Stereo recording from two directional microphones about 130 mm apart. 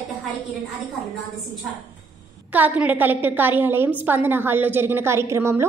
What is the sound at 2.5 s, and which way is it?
A woman's voice, 15° right (ahead or behind).